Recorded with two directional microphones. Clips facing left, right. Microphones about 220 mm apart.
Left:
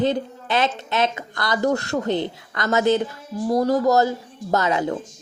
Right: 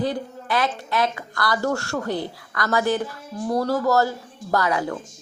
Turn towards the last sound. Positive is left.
turn(degrees=20)  # may be behind; listen again after turning